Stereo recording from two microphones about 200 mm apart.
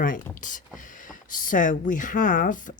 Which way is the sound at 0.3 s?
40° left (ahead or behind).